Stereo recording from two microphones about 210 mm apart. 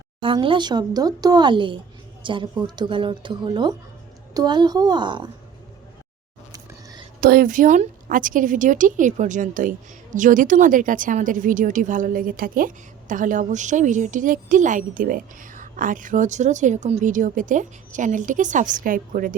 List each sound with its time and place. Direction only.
0.2 s speech: 25° right (ahead or behind)
7.2 s a woman's voice: 45° right (ahead or behind)